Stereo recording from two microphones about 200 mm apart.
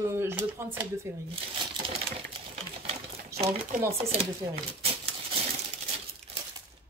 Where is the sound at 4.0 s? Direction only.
30° right (ahead or behind).